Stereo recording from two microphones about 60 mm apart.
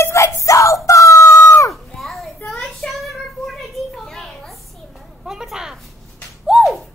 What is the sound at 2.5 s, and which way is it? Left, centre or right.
Child singing, centre.